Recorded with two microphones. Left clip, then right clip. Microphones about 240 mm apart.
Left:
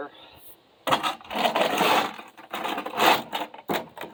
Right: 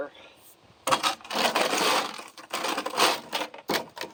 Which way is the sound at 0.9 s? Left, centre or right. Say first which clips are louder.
Left 1 dB; left.